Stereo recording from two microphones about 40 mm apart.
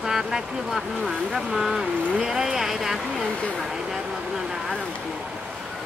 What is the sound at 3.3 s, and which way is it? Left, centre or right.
Speech, left.